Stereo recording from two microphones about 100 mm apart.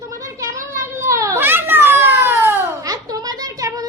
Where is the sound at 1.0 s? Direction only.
30° right (ahead or behind).